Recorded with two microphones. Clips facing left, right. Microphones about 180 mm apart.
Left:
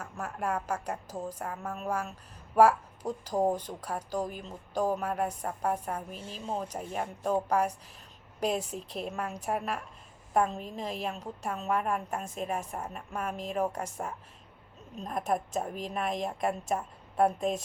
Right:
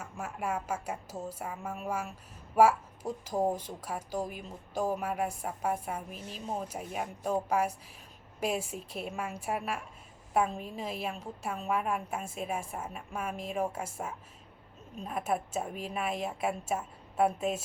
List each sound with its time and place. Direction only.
0.0 s a woman's voice: 5° right (ahead or behind)
6.1 s speech: 30° left (ahead or behind)
6.6 s a woman's voice: 5° right (ahead or behind)